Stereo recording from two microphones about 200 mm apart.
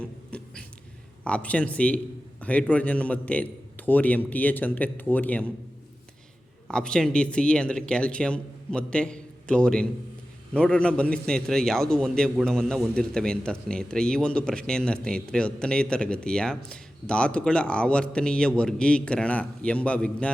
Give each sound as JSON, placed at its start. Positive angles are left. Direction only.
{"t": 0.0, "sound": "a sound", "side_deg": 5}
{"t": 1.2, "sound": "a man's voice", "side_deg": 5}
{"t": 6.7, "sound": "a man's voice", "side_deg": 5}